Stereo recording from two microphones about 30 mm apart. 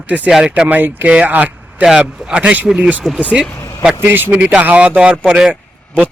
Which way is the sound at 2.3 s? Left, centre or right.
Right.